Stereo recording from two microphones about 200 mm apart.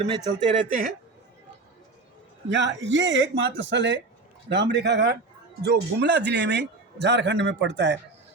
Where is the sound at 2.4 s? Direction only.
65° right (ahead or behind).